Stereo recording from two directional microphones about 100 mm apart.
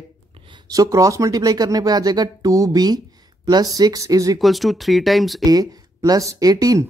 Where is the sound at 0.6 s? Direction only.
35° right (ahead or behind).